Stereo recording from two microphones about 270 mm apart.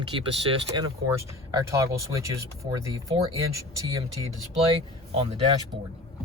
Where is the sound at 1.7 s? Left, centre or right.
Centre.